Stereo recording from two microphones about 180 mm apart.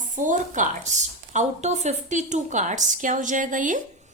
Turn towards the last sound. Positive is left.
turn(degrees=-45)  # may be behind; listen again after turning